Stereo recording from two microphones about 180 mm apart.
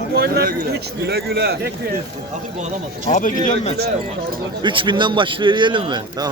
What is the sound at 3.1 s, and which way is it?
Speech, 45° left (ahead or behind).